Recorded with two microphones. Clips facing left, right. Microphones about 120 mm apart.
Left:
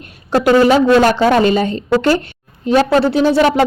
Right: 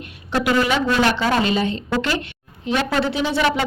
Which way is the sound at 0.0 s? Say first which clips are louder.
Left 8 dB; 40° left (ahead or behind).